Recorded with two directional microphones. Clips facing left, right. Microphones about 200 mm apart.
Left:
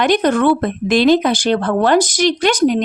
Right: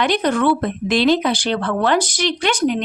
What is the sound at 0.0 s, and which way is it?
Speech, 45° left (ahead or behind).